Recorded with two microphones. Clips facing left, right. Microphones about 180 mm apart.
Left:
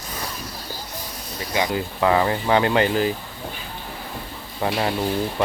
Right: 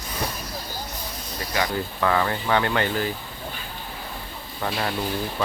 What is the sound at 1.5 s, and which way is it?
Speech, 20° left (ahead or behind).